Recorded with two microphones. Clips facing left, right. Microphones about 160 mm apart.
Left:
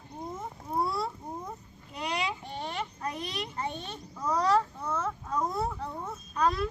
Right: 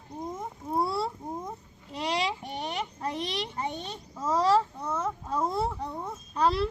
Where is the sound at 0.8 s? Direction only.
30° right (ahead or behind).